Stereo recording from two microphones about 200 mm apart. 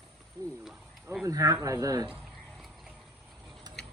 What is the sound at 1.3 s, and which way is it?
Speech, 15° right (ahead or behind).